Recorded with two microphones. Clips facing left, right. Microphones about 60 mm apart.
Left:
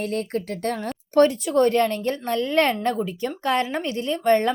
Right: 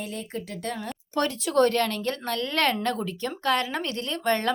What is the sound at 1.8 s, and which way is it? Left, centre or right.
Speech, left.